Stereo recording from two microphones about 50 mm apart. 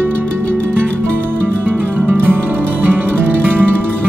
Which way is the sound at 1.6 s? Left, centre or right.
Right.